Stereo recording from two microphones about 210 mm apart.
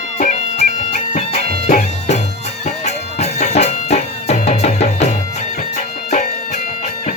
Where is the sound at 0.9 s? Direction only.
35° left (ahead or behind).